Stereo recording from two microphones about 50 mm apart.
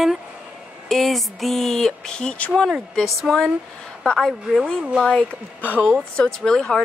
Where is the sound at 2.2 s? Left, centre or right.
Centre.